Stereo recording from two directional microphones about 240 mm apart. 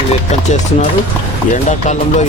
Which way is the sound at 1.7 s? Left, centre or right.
Left.